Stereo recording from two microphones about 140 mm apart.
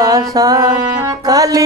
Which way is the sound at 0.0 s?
25° right (ahead or behind).